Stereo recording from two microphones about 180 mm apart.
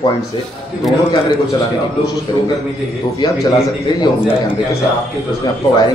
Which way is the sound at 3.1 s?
25° left (ahead or behind).